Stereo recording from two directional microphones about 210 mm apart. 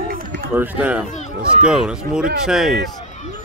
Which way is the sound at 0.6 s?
5° right (ahead or behind).